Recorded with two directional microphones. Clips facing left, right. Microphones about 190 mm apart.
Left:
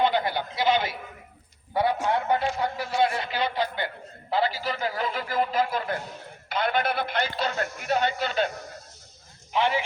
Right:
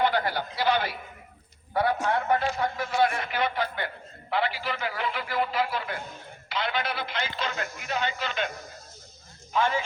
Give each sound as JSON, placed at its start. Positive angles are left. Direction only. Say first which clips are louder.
{"t": 0.0, "sound": "a sound", "louder": "left 1 dB", "side_deg": 20}
{"t": 1.7, "sound": "a man's voice", "louder": "left 1 dB", "side_deg": 25}
{"t": 7.3, "sound": "a man's voice", "louder": "left 4 dB", "side_deg": 40}
{"t": 9.5, "sound": "speech", "louder": "left 1 dB", "side_deg": 20}